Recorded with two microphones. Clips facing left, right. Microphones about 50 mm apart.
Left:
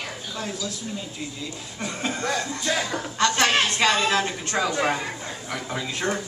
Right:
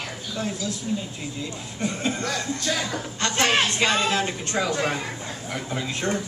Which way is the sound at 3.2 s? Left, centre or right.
Right.